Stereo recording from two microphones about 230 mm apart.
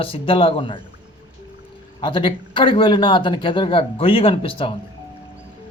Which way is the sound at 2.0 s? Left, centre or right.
Left.